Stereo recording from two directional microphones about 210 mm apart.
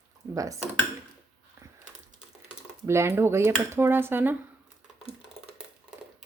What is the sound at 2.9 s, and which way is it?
Speech, 10° right (ahead or behind).